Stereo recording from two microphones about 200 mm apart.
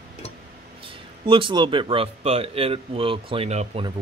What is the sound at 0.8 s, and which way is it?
Speech, 25° right (ahead or behind).